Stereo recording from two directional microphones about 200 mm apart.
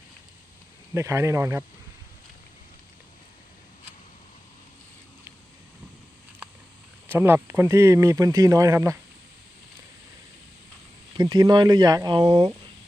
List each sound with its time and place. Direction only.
0.9 s speech: 15° right (ahead or behind)
7.1 s speech: 10° right (ahead or behind)
11.2 s speech: 20° right (ahead or behind)